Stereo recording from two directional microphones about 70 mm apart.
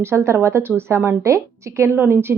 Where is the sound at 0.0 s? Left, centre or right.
Right.